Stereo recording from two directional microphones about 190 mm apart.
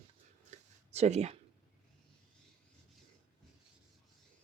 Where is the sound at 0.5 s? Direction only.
40° right (ahead or behind).